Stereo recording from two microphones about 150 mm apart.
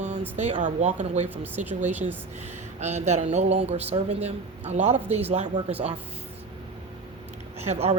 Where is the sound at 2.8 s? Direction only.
50° right (ahead or behind).